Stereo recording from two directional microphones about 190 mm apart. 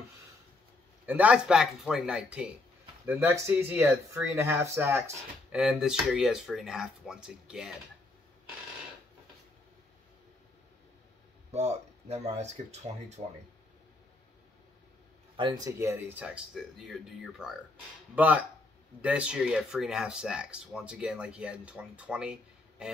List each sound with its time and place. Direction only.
1.0 s speech: 10° right (ahead or behind)
11.5 s speech: 35° right (ahead or behind)
15.3 s speech: 25° right (ahead or behind); by 22.8 s 5° right (ahead or behind)